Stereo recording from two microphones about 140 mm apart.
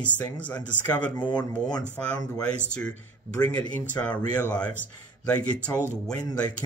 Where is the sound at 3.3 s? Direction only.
10° left (ahead or behind).